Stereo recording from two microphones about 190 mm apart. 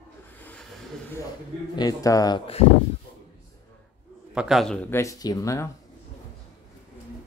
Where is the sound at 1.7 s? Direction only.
20° left (ahead or behind).